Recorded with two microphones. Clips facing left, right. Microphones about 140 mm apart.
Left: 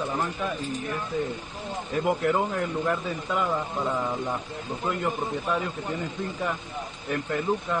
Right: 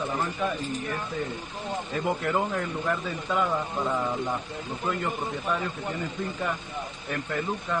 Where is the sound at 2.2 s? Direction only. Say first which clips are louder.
Left 2 dB; 5° left (ahead or behind).